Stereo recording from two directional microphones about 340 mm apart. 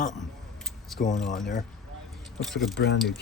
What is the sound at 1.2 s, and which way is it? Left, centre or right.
Speech, centre.